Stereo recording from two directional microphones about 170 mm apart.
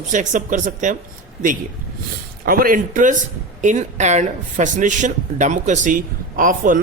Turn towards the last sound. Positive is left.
turn(degrees=-50)  # may be behind; listen again after turning